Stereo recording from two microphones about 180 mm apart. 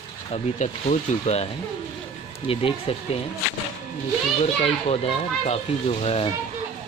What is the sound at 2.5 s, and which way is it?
Speech, 30° left (ahead or behind).